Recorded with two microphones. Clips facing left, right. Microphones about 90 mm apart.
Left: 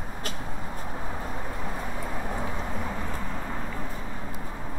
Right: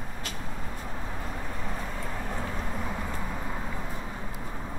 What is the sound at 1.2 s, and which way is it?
Vehicle, 5° left (ahead or behind).